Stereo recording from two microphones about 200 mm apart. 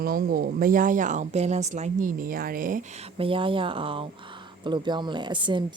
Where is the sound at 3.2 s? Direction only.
25° right (ahead or behind).